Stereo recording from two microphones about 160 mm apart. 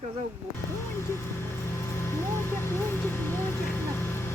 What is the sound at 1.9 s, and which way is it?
Vehicle, 15° left (ahead or behind).